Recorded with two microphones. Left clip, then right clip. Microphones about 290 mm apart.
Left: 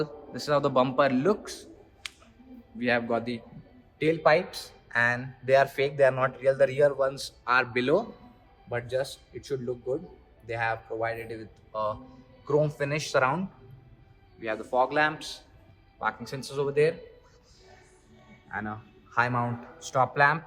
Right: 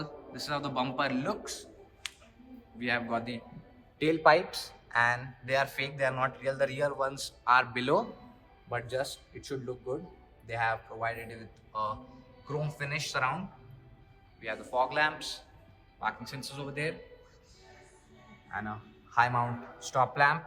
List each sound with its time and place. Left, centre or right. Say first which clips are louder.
0.0 s a man's voice: left 7 dB; centre
3.9 s a man's voice: left 1 dB; centre
14.4 s a man's voice: left 5 dB; centre
18.4 s a man's voice: left 3 dB; centre